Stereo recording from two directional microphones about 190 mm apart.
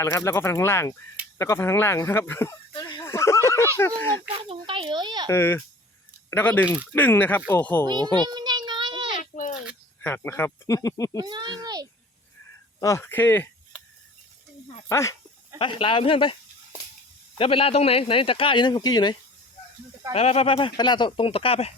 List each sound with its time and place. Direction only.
0.0 s speech: 15° left (ahead or behind)
2.7 s a sound: 25° left (ahead or behind)
3.0 s speech: 15° left (ahead or behind)
4.4 s speech: 25° right (ahead or behind)
5.3 s speech: 10° left (ahead or behind)
7.9 s speech: 20° right (ahead or behind)
8.3 s child singing: 25° right (ahead or behind)
9.3 s a sound: 45° left (ahead or behind)
10.0 s speech: 10° left (ahead or behind)
11.2 s speech: 25° right (ahead or behind)
12.8 s speech: 15° left (ahead or behind)
14.8 s speech: 15° left (ahead or behind)
15.5 s speech: 25° left (ahead or behind)
20.1 s speech: 30° left (ahead or behind)